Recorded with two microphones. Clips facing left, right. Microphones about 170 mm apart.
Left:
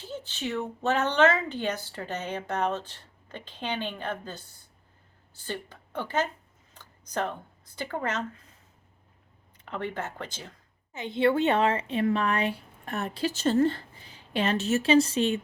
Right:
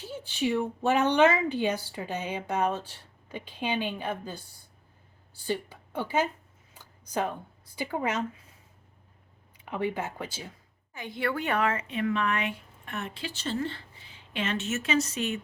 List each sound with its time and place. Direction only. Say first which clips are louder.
0.0 s a woman's voice: right 4 dB; 10° right (ahead or behind)
6.7 s a sound: right 1 dB; 10° right (ahead or behind)
9.6 s a woman's voice: right 3 dB; 10° right (ahead or behind)
10.9 s a woman's voice: left 7 dB; 25° left (ahead or behind)